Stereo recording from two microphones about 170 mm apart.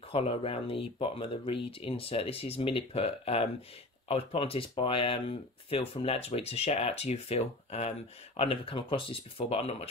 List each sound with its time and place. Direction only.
0.1 s speech: 35° left (ahead or behind)